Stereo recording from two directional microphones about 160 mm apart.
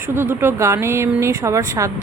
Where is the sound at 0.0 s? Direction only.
15° right (ahead or behind).